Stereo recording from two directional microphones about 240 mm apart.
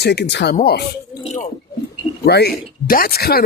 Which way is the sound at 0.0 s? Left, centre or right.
Left.